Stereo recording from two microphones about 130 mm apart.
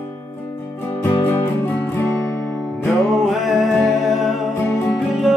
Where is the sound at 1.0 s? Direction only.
15° left (ahead or behind).